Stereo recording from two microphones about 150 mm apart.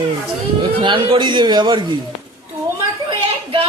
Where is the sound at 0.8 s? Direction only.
35° right (ahead or behind).